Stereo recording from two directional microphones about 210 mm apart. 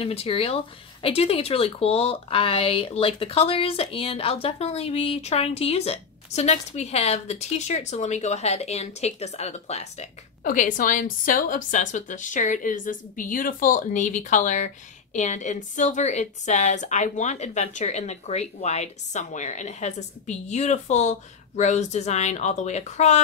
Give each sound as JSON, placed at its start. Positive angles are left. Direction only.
{"t": 0.0, "sound": "speech", "side_deg": 25}